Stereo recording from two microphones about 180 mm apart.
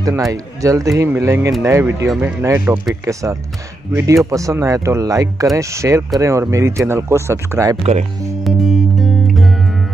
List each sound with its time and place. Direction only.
0.0 s speech: 20° right (ahead or behind)
3.1 s speech: 15° right (ahead or behind)
7.7 s speech: 35° right (ahead or behind)
8.5 s music: centre (ahead or behind)